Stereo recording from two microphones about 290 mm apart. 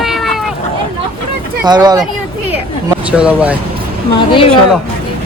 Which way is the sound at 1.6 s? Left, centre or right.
Centre.